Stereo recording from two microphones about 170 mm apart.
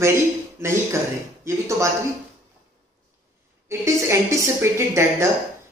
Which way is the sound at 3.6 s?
15° right (ahead or behind).